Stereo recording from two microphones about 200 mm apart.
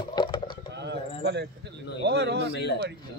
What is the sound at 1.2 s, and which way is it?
A man's voice, 60° right (ahead or behind).